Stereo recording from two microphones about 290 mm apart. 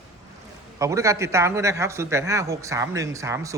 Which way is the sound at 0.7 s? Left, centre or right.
Centre.